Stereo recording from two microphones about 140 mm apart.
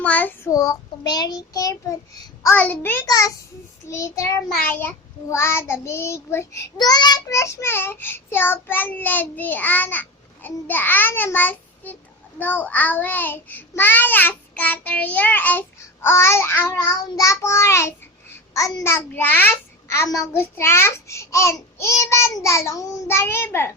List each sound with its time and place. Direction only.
0.0 s child singing: 10° left (ahead or behind)
0.5 s a child's voice: 25° left (ahead or behind)
2.4 s child singing: 15° left (ahead or behind)
3.1 s a child's voice: 25° left (ahead or behind)
4.6 s child singing: 15° left (ahead or behind)
16.7 s a child's voice: 20° left (ahead or behind)